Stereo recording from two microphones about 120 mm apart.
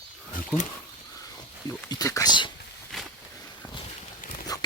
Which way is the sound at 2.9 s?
Centre (ahead or behind).